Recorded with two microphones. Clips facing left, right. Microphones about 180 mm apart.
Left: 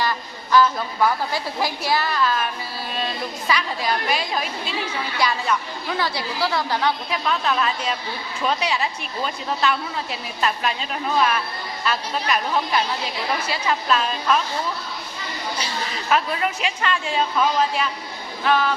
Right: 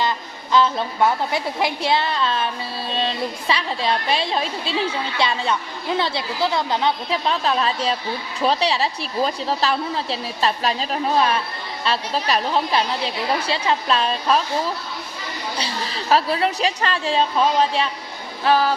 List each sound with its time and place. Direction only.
0.0 s a woman's voice: 20° right (ahead or behind)
15.5 s a woman's voice: 30° right (ahead or behind)